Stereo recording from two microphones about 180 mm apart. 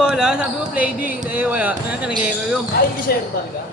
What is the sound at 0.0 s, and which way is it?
Speech, 5° right (ahead or behind).